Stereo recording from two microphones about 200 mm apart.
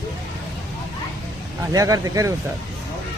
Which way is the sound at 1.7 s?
15° right (ahead or behind).